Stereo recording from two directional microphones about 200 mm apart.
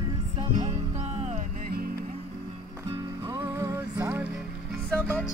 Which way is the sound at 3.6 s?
10° right (ahead or behind).